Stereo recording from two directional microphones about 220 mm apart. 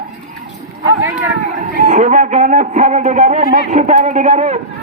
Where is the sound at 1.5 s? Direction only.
35° right (ahead or behind).